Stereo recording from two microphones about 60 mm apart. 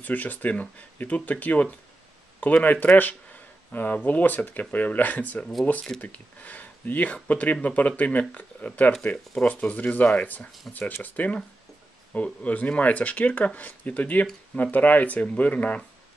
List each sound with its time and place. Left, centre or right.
0.0 s speech: left
5.4 s speech: centre
5.9 s speech: left